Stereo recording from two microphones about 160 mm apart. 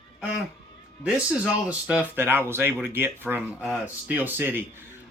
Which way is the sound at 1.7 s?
10° right (ahead or behind).